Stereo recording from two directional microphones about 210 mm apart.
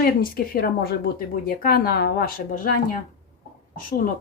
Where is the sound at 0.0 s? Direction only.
45° left (ahead or behind).